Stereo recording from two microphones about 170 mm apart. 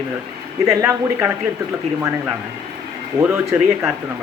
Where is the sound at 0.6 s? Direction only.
15° right (ahead or behind).